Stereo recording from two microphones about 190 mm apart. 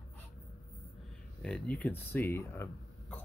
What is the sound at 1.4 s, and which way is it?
Speech, 5° left (ahead or behind).